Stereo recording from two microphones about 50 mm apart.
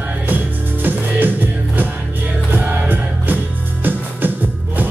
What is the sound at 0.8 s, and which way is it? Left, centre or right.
Music, right.